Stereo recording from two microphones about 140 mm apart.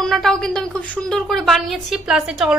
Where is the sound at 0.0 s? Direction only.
5° left (ahead or behind).